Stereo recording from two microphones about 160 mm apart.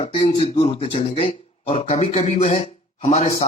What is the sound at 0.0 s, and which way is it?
Speech, 40° left (ahead or behind).